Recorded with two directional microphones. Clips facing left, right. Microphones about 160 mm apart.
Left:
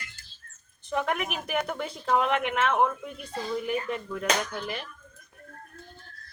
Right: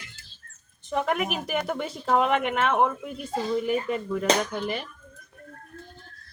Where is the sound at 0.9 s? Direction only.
Centre (ahead or behind).